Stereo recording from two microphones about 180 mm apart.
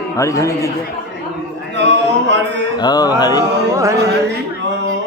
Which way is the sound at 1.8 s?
80° right.